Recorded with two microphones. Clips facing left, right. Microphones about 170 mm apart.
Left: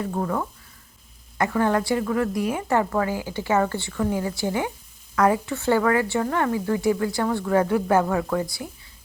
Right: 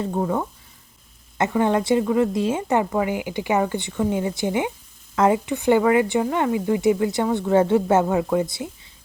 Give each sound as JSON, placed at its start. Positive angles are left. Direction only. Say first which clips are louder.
{"t": 0.0, "sound": "a woman's voice", "louder": "right 3 dB", "side_deg": -20}